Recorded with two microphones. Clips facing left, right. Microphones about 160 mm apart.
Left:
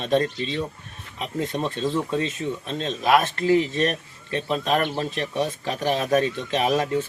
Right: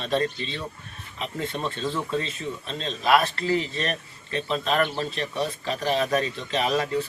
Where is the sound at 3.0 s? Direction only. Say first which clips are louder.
Left 2 dB; 45° left (ahead or behind).